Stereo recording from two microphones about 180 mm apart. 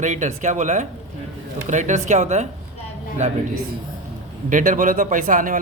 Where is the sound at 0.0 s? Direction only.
40° right (ahead or behind).